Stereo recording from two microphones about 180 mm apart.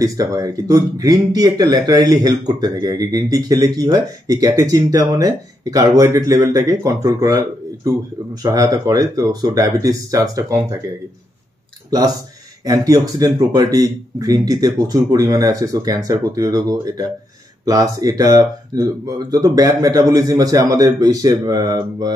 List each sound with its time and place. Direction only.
0.0 s speech: 20° right (ahead or behind)
12.6 s speech: 20° right (ahead or behind)